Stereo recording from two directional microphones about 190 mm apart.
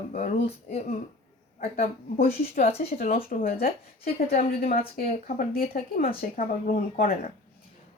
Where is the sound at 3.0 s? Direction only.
50° left (ahead or behind).